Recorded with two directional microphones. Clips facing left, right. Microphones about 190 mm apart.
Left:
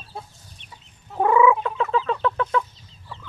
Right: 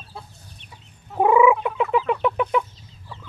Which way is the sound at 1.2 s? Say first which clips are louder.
Right 2 dB; 15° right (ahead or behind).